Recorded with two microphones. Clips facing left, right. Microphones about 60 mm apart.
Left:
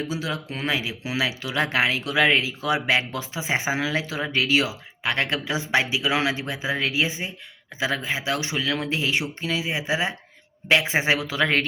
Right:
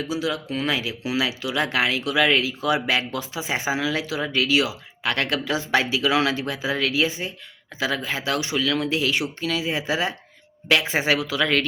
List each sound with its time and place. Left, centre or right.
0.1 s speech: left